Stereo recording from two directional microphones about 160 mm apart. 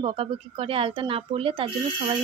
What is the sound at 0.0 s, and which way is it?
Speech, 35° right (ahead or behind).